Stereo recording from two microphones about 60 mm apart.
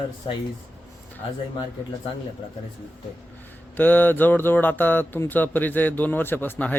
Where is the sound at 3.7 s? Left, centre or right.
Left.